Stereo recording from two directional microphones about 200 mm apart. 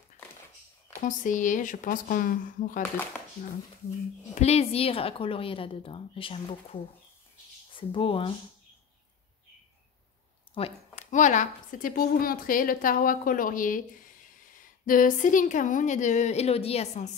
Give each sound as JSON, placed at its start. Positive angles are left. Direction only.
{"t": 1.0, "sound": "a woman's voice", "side_deg": 40}
{"t": 4.4, "sound": "a woman's voice", "side_deg": 30}
{"t": 10.5, "sound": "a woman's voice", "side_deg": 30}